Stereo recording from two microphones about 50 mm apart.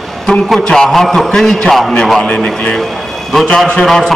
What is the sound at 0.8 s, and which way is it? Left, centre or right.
A man's voice, centre.